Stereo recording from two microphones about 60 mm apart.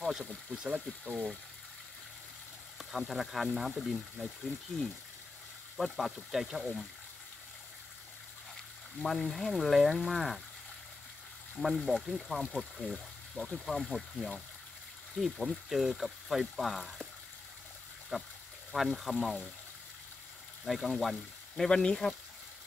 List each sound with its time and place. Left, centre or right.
0.2 s speech: centre
2.8 s speech: centre
5.8 s speech: centre
9.0 s speech: centre
11.5 s speech: centre
13.7 s speech: centre
18.1 s speech: centre
20.6 s speech: centre
21.6 s speech: centre